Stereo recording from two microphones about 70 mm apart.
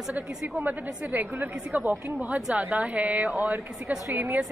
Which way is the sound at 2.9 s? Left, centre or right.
Right.